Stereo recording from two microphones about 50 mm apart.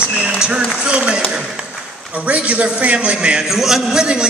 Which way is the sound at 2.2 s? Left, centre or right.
Right.